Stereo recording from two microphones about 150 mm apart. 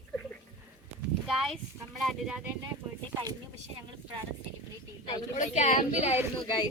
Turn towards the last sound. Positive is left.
turn(degrees=30)  # may be behind; listen again after turning